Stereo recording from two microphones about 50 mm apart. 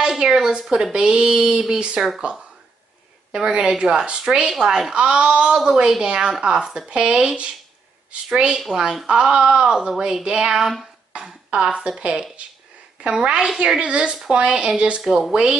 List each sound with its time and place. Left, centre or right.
0.0 s a woman's voice: centre
3.3 s a woman's voice: centre
10.5 s speech: centre
11.1 s a woman's voice: centre
15.0 s a woman's voice: centre